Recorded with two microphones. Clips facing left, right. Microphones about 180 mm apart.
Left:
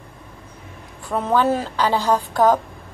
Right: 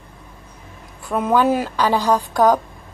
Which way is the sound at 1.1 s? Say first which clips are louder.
Right 2 dB; 10° right (ahead or behind).